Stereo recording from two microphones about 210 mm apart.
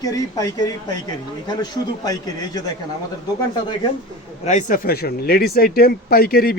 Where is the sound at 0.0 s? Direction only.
15° left (ahead or behind).